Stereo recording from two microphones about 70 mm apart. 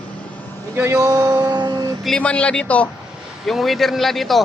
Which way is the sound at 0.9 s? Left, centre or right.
Right.